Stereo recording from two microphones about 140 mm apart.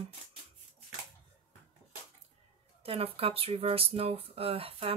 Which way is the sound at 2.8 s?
40° right (ahead or behind).